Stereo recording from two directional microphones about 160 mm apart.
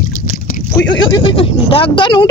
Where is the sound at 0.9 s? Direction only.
25° left (ahead or behind).